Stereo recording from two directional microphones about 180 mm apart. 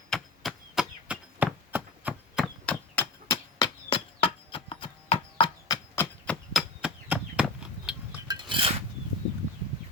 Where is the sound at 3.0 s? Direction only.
10° left (ahead or behind).